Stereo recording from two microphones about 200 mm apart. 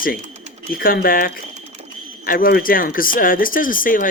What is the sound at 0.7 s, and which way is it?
Speech, 45° left (ahead or behind).